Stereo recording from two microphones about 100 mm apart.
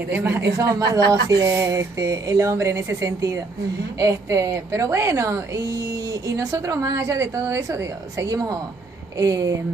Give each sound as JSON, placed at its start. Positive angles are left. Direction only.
{"t": 0.1, "sound": "speech", "side_deg": -20}
{"t": 0.7, "sound": "a woman's voice", "side_deg": -35}